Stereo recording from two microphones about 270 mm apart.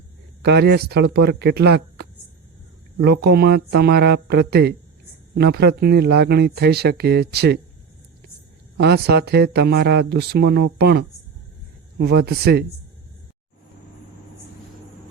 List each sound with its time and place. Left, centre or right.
0.4 s speech: right
8.8 s speech: right